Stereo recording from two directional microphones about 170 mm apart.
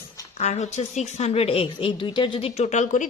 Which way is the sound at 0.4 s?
40° left (ahead or behind).